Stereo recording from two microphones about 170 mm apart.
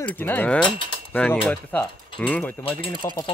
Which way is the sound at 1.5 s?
10° left (ahead or behind).